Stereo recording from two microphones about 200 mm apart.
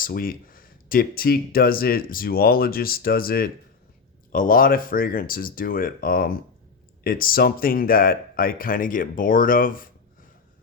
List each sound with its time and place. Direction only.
0.0 s speech: 45° left (ahead or behind)